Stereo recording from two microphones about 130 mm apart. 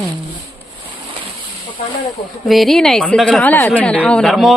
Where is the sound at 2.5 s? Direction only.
Centre (ahead or behind).